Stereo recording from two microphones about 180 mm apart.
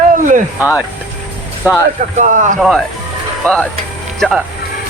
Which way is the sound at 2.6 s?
Centre (ahead or behind).